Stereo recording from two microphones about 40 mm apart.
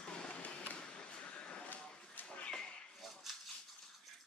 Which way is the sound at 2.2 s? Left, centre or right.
Left.